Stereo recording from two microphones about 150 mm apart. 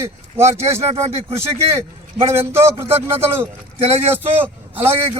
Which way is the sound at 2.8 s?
40° right (ahead or behind).